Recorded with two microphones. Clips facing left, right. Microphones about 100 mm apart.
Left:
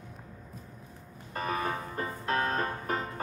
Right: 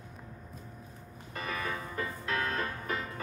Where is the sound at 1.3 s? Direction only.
40° left (ahead or behind).